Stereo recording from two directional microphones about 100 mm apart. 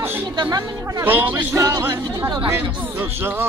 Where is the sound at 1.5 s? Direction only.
40° right (ahead or behind).